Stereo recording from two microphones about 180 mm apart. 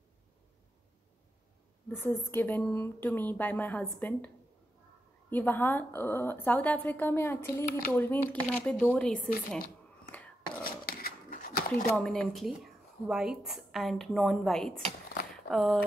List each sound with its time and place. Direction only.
1.9 s a woman's voice: 10° left (ahead or behind)
5.3 s a woman's voice: 10° left (ahead or behind)
10.1 s whispering: 10° left (ahead or behind)
10.6 s dog: 55° left (ahead or behind)
12.0 s a woman's voice: centre (ahead or behind)